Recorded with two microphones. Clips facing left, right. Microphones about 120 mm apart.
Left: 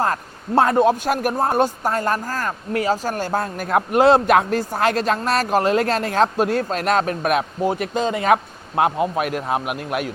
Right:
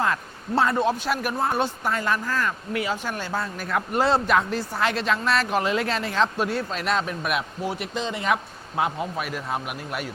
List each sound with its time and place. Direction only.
0.0 s a man's voice: 45° left (ahead or behind); by 10.1 s 65° left (ahead or behind)